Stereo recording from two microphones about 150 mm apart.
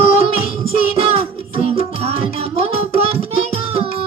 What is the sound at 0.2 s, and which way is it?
Music, 40° right (ahead or behind).